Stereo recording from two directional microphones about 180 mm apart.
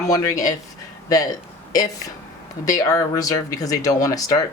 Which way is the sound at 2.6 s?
20° left (ahead or behind).